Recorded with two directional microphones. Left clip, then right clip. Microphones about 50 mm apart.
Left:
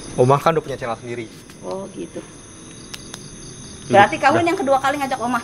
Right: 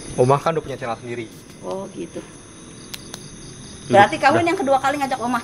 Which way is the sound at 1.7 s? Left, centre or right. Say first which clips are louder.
Even; centre.